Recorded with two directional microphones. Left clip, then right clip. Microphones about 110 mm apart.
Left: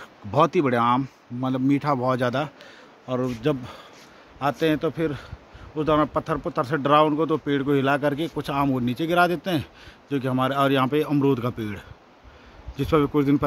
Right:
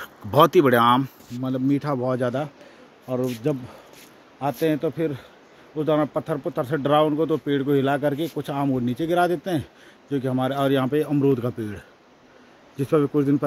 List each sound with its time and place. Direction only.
0.0 s speech: 5° right (ahead or behind)
1.4 s a man's voice: 15° left (ahead or behind)
4.4 s speech: 5° left (ahead or behind)
8.6 s speech: 15° left (ahead or behind)
8.9 s speech: centre (ahead or behind)